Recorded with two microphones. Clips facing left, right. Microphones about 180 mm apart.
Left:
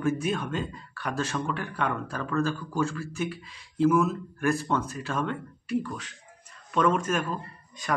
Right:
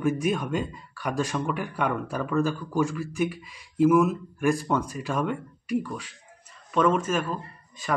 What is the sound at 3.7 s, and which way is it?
Speech, 5° right (ahead or behind).